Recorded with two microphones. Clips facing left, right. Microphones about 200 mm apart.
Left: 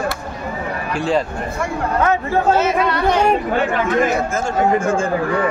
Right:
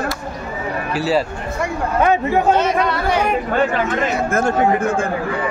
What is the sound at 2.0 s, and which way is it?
Speech, 15° right (ahead or behind).